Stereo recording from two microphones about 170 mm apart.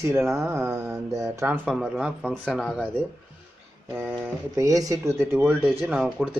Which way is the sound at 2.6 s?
Centre (ahead or behind).